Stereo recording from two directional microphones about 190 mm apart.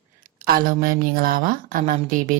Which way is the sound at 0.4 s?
50° right (ahead or behind).